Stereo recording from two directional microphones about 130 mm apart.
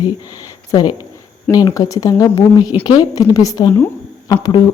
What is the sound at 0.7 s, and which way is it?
Speech, 30° left (ahead or behind).